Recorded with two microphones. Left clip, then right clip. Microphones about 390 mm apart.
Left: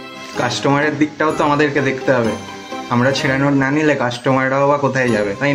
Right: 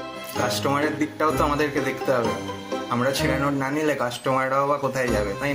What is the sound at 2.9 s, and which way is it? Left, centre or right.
Speech, right.